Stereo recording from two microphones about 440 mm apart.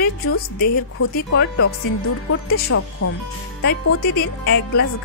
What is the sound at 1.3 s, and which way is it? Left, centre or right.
Speech, left.